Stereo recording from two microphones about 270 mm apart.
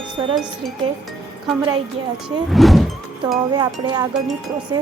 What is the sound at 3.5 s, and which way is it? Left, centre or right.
Speech, centre.